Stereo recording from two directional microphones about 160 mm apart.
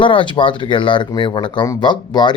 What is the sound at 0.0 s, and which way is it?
Speech, 30° left (ahead or behind).